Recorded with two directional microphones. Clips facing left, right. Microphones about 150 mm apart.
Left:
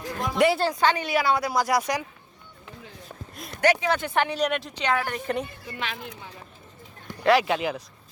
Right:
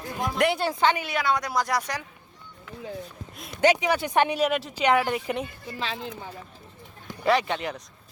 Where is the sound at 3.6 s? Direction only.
20° right (ahead or behind).